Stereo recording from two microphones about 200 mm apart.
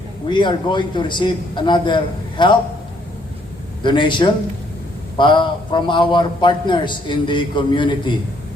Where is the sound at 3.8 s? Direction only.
25° left (ahead or behind).